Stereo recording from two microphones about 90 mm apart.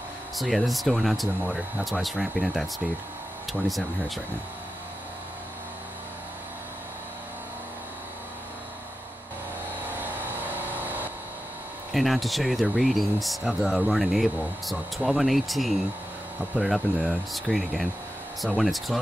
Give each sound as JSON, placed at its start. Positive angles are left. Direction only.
{"t": 0.4, "sound": "speech", "side_deg": 0}
{"t": 9.8, "sound": "vehicle", "side_deg": -20}
{"t": 11.9, "sound": "speech", "side_deg": 0}